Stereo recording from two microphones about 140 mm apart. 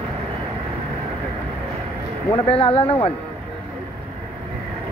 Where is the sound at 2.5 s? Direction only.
40° left (ahead or behind).